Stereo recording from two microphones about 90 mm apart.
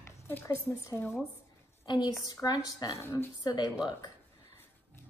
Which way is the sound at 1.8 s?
55° left (ahead or behind).